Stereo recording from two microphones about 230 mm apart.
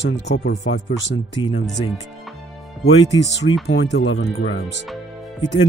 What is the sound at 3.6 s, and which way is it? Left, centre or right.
Speech, left.